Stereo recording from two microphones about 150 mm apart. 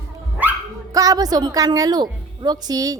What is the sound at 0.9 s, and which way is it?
A woman's voice, 25° right (ahead or behind).